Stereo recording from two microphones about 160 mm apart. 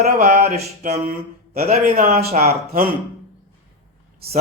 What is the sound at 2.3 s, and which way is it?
Speech, 45° right (ahead or behind).